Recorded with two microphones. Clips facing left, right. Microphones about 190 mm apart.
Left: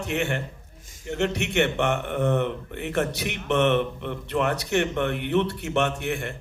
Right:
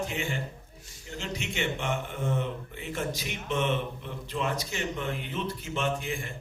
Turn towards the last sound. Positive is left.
turn(degrees=70)  # may be behind; listen again after turning